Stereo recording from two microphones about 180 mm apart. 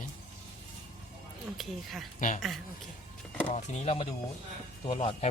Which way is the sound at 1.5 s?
Centre (ahead or behind).